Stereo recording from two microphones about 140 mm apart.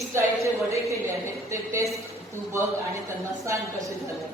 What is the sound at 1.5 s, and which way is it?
Speech, 20° right (ahead or behind).